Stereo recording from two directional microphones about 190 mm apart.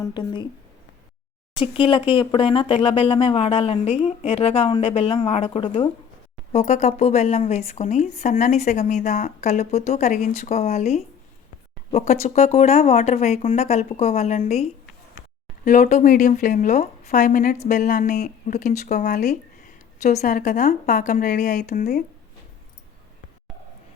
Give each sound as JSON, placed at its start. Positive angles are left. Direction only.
{"t": 0.0, "sound": "speech", "side_deg": 25}
{"t": 1.5, "sound": "a woman's voice", "side_deg": 25}